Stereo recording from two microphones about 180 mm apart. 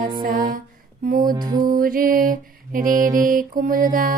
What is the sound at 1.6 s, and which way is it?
Music, 50° right (ahead or behind).